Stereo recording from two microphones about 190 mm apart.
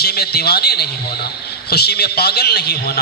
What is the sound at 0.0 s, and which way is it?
A man's voice, 55° left (ahead or behind).